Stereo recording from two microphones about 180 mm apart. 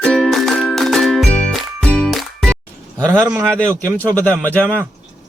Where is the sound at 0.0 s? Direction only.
5° left (ahead or behind).